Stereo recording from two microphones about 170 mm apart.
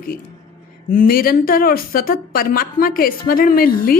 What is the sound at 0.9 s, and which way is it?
Speech, 60° left (ahead or behind).